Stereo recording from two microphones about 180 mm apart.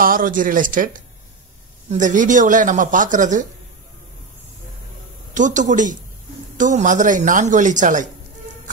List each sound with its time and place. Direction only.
0.0 s speech: 50° right (ahead or behind)
1.9 s speech: 45° right (ahead or behind)
5.3 s speech: 45° right (ahead or behind)